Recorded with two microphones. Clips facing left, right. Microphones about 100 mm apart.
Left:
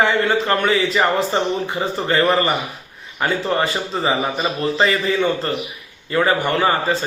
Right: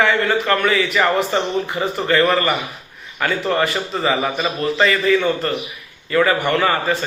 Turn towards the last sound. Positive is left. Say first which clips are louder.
# even
turn(degrees=25)  # may be behind; listen again after turning